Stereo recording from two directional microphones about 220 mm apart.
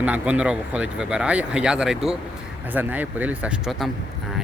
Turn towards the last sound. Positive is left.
turn(degrees=-5)  # may be behind; listen again after turning